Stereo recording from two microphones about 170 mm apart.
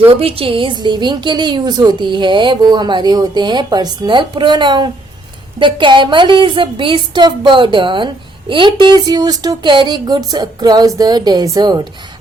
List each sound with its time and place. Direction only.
0.1 s a woman's voice: 35° right (ahead or behind)